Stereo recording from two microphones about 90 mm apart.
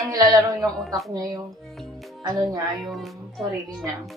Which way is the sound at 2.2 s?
45° right (ahead or behind).